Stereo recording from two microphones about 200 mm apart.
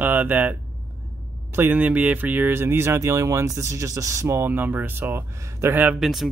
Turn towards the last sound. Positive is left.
turn(degrees=0)  # may be behind; listen again after turning